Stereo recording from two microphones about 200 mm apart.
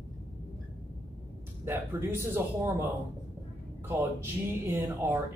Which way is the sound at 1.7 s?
10° right (ahead or behind).